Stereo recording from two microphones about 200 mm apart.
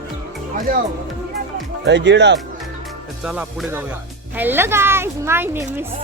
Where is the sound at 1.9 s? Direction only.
60° right (ahead or behind).